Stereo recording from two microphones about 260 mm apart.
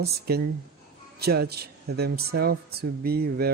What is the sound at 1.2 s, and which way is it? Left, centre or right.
Speech, right.